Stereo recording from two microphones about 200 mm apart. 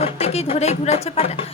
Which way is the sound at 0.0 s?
30° left (ahead or behind).